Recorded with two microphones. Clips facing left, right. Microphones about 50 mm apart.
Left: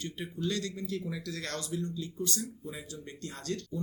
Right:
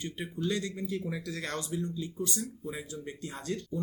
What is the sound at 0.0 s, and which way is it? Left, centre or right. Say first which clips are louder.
Speech: right 1 dB; centre.